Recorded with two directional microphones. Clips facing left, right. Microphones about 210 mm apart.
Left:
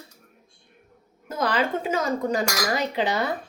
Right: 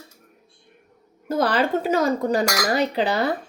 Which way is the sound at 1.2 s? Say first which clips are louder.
Right 4 dB; 35° right (ahead or behind).